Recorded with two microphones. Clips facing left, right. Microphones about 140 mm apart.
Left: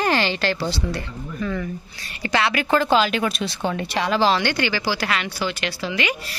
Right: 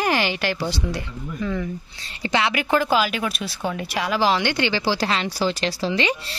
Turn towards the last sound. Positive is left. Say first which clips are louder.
# right 2 dB
turn(degrees=-30)  # may be behind; listen again after turning